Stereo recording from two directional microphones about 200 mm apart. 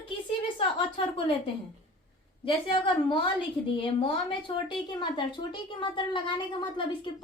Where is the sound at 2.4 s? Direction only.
25° left (ahead or behind).